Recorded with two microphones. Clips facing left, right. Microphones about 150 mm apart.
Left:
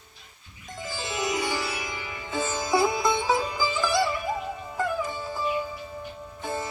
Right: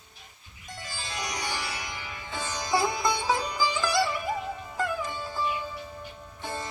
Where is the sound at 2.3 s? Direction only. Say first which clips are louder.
Left 4 dB; 20° left (ahead or behind).